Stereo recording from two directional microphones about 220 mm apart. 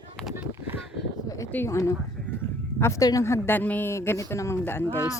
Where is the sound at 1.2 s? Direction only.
15° left (ahead or behind).